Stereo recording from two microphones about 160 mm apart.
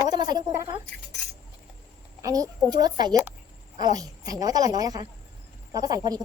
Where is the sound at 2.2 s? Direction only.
20° right (ahead or behind).